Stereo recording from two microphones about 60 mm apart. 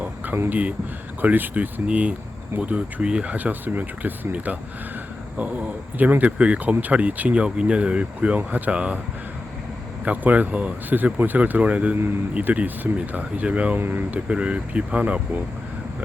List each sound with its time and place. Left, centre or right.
1.2 s speech: right
3.3 s speech: right
10.0 s speech: right
13.7 s speech: right
14.3 s speech: centre